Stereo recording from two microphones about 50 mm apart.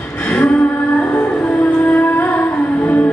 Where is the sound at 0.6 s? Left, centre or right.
Left.